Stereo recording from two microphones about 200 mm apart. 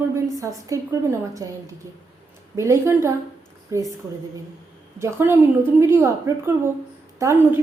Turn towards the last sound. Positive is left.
turn(degrees=-10)  # may be behind; listen again after turning